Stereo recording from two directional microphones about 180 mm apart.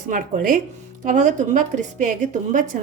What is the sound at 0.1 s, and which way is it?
A woman's voice, 45° right (ahead or behind).